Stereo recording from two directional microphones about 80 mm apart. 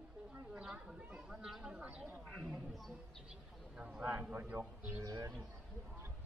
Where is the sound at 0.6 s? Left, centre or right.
Centre.